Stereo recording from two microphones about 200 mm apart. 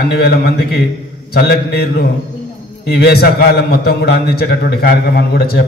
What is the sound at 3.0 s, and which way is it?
A man's voice, 55° left (ahead or behind).